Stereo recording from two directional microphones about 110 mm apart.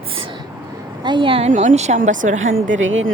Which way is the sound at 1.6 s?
90° right.